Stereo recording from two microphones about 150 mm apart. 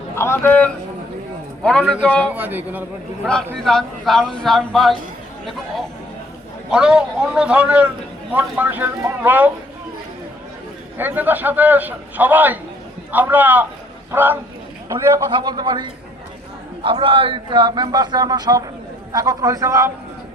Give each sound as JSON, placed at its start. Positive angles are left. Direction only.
{"t": 0.2, "sound": "a man's voice", "side_deg": 15}
{"t": 1.9, "sound": "a man's voice", "side_deg": 10}
{"t": 2.3, "sound": "a man's voice", "side_deg": -10}
{"t": 3.2, "sound": "speech", "side_deg": 5}
{"t": 6.7, "sound": "a man's voice", "side_deg": -5}
{"t": 10.9, "sound": "a man's voice", "side_deg": -10}